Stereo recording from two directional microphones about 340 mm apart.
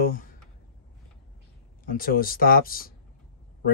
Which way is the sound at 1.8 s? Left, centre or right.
Left.